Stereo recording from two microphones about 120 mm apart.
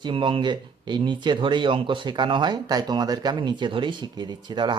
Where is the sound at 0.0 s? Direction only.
45° right (ahead or behind).